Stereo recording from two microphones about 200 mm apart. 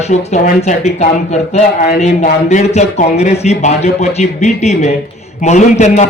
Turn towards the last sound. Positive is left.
turn(degrees=35)  # may be behind; listen again after turning